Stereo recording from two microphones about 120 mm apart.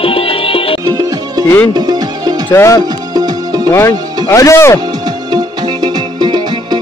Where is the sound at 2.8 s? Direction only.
35° right (ahead or behind).